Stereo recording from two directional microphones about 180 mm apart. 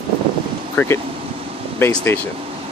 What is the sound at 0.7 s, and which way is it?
Speech, 10° left (ahead or behind).